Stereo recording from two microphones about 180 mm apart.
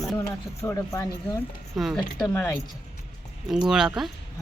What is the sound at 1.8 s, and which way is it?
Speech, centre (ahead or behind).